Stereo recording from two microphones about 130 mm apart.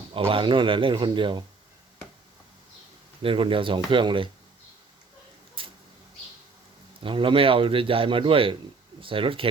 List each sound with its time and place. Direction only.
0.1 s speech: 45° right (ahead or behind)
3.2 s speech: 45° right (ahead or behind)
5.6 s a sound: 40° right (ahead or behind)
7.0 s a man's voice: 40° right (ahead or behind)